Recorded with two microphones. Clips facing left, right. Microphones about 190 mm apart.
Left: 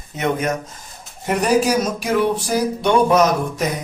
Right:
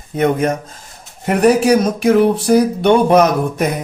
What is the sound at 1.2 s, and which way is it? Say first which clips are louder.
Speech: right 5 dB; 60° right (ahead or behind).